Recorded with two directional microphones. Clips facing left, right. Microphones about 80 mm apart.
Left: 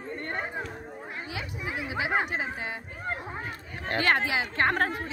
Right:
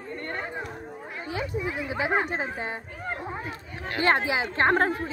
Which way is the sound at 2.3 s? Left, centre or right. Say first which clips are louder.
Right 2 dB; right.